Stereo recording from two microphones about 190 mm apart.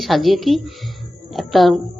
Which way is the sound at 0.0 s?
Centre (ahead or behind).